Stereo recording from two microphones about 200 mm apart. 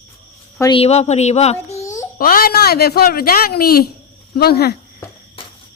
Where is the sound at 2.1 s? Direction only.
45° left (ahead or behind).